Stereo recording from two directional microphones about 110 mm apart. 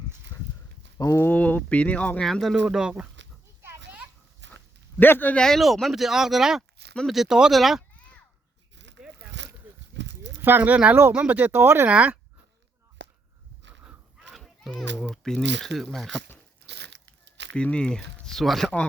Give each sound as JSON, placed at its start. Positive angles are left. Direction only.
{"t": 0.9, "sound": "speech", "side_deg": 30}
{"t": 1.2, "sound": "speech", "side_deg": 15}
{"t": 4.9, "sound": "speech", "side_deg": 20}
{"t": 10.4, "sound": "speech", "side_deg": -15}
{"t": 13.8, "sound": "a sound", "side_deg": 0}
{"t": 14.7, "sound": "speech", "side_deg": 10}
{"t": 17.5, "sound": "speech", "side_deg": 10}